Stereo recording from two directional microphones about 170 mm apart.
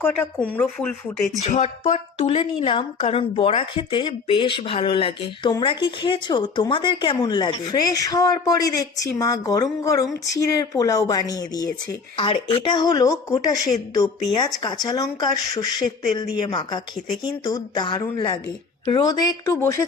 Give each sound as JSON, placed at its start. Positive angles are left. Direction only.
{"t": 0.0, "sound": "speech", "side_deg": 10}
{"t": 1.4, "sound": "a woman's voice", "side_deg": 40}